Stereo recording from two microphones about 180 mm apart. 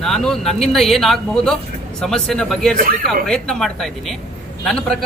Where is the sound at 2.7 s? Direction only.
50° right (ahead or behind).